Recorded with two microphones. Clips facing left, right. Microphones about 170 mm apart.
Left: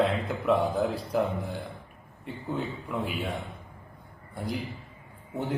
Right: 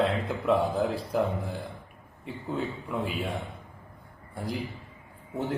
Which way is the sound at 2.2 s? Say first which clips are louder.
Right 1 dB; centre (ahead or behind).